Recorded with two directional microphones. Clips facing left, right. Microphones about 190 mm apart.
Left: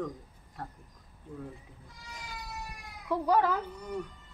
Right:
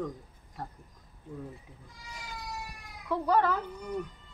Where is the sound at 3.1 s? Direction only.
10° left (ahead or behind).